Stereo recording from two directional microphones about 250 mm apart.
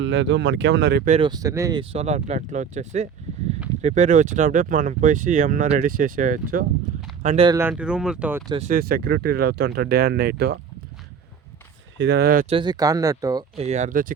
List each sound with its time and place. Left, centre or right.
0.0 s speech: right
1.1 s speech: centre
7.4 s speech: centre
8.5 s speech: right
11.9 s speech: right
12.5 s speech: centre
13.7 s speech: right